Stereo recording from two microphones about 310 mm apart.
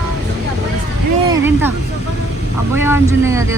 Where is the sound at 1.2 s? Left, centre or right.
Centre.